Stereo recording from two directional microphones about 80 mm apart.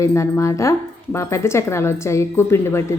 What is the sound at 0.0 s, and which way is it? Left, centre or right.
A woman's voice, left.